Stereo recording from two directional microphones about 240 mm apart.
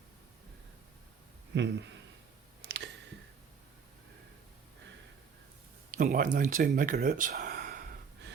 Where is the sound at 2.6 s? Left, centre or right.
Right.